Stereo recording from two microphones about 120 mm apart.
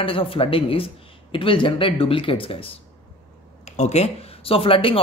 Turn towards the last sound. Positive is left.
turn(degrees=50)  # may be behind; listen again after turning